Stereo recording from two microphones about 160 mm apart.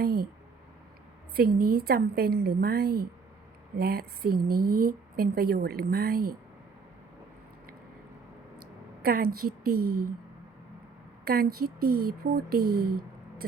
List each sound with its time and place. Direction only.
0.0 s a sound: 70° right (ahead or behind)
1.4 s speech: 75° right (ahead or behind)
9.0 s speech: 70° right (ahead or behind)
11.3 s speech: 70° right (ahead or behind)